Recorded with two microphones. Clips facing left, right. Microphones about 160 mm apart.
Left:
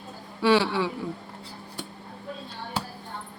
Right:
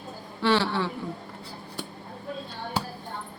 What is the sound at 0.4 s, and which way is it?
Speech, 10° left (ahead or behind).